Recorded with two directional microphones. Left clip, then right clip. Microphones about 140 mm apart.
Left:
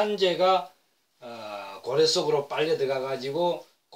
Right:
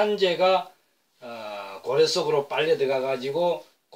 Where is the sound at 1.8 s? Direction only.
25° left (ahead or behind).